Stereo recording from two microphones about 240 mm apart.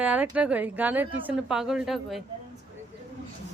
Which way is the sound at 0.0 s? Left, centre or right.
Centre.